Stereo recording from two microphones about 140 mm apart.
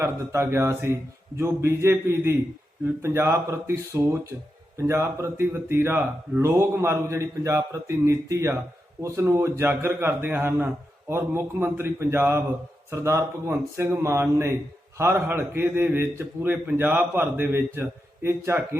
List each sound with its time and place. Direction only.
0.0 s a man's voice: 20° right (ahead or behind)